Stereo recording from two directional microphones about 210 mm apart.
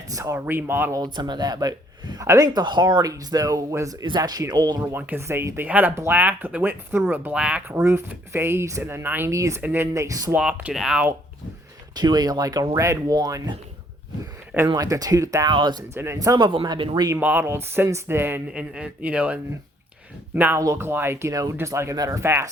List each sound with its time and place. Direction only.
0.1 s speech: 15° right (ahead or behind)
10.3 s speech: 5° right (ahead or behind)
11.9 s a man's voice: 20° right (ahead or behind)
17.2 s speech: 10° right (ahead or behind)